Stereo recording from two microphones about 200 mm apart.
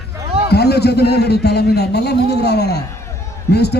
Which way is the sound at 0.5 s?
55° left (ahead or behind).